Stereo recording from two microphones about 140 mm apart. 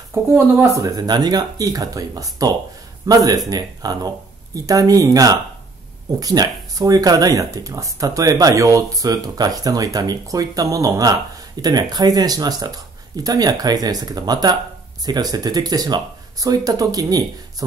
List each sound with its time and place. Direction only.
0.1 s speech: 20° right (ahead or behind)